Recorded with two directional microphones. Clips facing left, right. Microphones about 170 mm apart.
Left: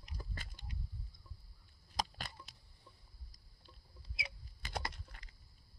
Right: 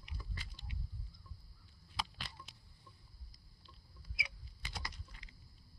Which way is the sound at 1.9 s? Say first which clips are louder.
Left 4 dB; 45° left (ahead or behind).